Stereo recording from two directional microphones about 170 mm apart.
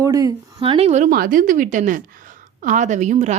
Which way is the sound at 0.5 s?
30° right (ahead or behind).